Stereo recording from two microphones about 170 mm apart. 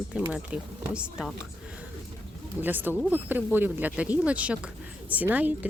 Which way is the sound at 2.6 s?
10° right (ahead or behind).